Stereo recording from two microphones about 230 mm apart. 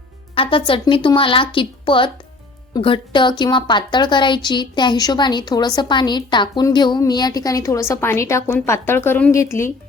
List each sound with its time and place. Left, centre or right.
0.3 s a woman's voice: left